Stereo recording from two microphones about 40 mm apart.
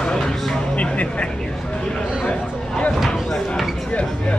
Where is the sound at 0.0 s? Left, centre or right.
Left.